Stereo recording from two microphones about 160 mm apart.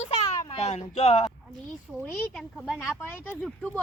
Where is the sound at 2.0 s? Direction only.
Centre (ahead or behind).